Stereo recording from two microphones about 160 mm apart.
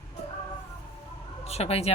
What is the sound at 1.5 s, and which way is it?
Speech, 40° left (ahead or behind).